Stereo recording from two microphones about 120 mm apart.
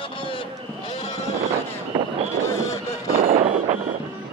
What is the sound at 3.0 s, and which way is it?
Artillery fire, 55° right (ahead or behind).